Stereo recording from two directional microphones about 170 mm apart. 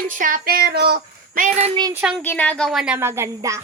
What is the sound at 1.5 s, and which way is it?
Speech, 35° right (ahead or behind).